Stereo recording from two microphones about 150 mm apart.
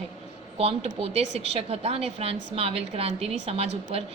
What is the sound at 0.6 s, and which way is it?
A woman's voice, 40° right (ahead or behind).